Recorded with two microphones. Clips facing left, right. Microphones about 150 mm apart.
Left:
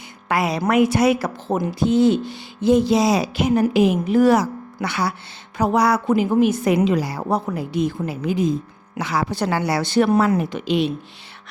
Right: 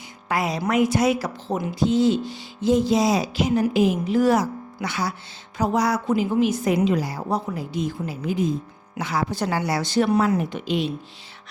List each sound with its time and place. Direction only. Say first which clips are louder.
0.3 s speech: left 3 dB; 70° left (ahead or behind)